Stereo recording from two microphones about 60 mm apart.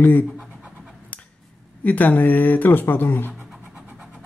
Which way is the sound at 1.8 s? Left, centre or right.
Left.